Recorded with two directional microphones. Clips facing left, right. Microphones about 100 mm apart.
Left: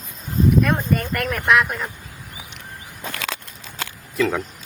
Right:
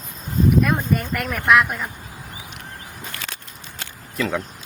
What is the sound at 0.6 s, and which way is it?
Speech, centre (ahead or behind).